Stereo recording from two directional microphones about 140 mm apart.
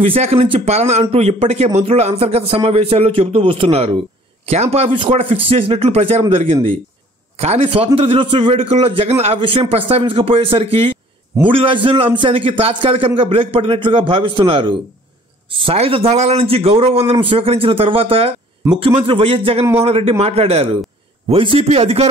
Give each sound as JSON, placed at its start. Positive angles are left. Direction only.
{"t": 0.0, "sound": "a man's voice", "side_deg": -45}